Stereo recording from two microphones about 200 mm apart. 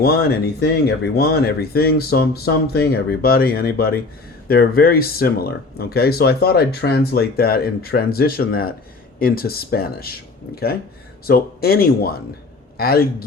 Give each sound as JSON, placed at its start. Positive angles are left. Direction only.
{"t": 0.0, "sound": "speech", "side_deg": 50}